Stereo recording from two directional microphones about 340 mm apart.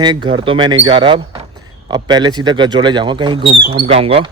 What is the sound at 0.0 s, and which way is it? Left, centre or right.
A man's voice, centre.